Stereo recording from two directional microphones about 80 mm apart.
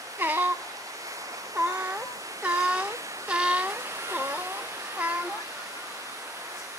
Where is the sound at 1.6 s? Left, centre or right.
Right.